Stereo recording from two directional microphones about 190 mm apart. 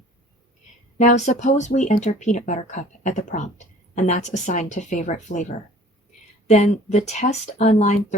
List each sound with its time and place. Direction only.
0.9 s speech: 40° left (ahead or behind)